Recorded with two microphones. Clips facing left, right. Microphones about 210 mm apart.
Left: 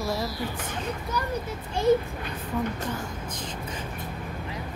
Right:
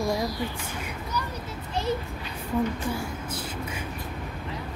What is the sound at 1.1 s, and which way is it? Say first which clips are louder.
Speech: even; 55° left (ahead or behind).